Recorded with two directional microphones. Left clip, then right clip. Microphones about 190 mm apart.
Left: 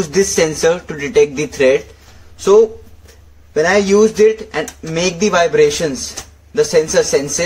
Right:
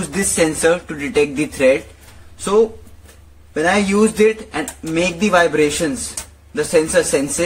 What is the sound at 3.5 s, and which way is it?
Speech, 15° left (ahead or behind).